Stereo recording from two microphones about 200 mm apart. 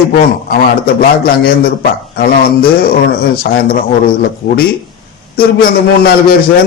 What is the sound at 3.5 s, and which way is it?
A man's voice, 50° left (ahead or behind).